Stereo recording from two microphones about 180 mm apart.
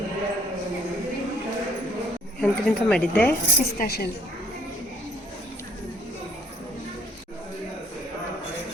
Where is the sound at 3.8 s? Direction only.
60° left (ahead or behind).